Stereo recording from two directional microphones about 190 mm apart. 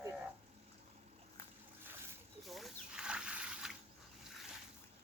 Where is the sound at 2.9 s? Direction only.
5° right (ahead or behind).